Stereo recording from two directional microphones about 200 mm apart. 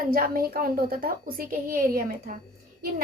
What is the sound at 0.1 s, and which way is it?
A woman's voice, 45° right (ahead or behind).